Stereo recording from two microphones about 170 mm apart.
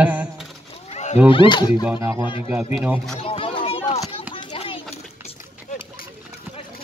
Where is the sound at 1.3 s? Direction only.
30° left (ahead or behind).